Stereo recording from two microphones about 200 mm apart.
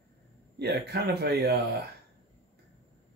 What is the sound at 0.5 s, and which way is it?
Speech, 55° right (ahead or behind).